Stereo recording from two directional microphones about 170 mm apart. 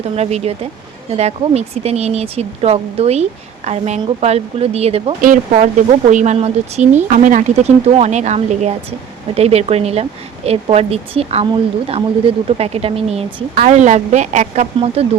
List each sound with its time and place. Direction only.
0.2 s speech: 40° right (ahead or behind)
5.2 s speech: 50° right (ahead or behind)